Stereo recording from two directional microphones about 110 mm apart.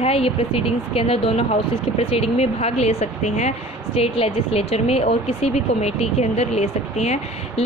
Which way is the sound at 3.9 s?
65° left (ahead or behind).